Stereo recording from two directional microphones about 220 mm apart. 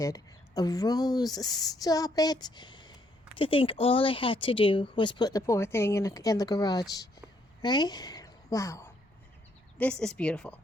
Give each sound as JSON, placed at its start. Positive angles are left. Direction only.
{"t": 0.0, "sound": "a woman's voice", "side_deg": 15}